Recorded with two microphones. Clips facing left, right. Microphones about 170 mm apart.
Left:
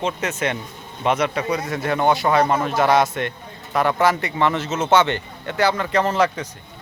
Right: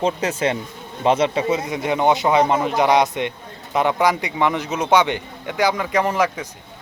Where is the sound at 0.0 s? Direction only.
30° right (ahead or behind).